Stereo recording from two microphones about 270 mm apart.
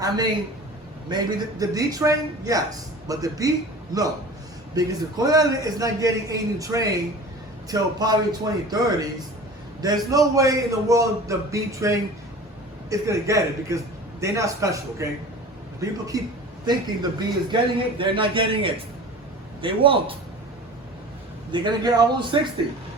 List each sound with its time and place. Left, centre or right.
1.0 s a man's voice: centre
4.7 s a man's voice: centre
21.5 s a man's voice: centre